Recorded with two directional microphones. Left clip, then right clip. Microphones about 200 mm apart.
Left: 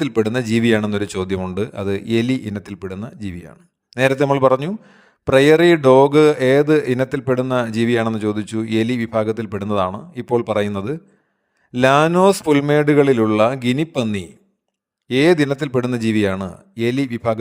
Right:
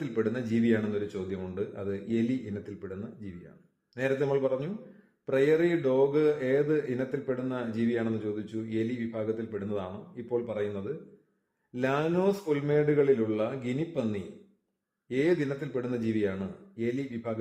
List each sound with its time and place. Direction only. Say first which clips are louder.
0.0 s speech: left 12 dB; 45° left (ahead or behind)